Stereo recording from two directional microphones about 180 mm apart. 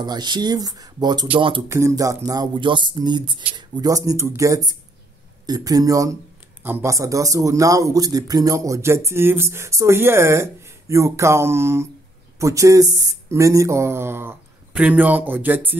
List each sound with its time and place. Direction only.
0.0 s speech: 25° right (ahead or behind)
1.7 s speech: 15° right (ahead or behind)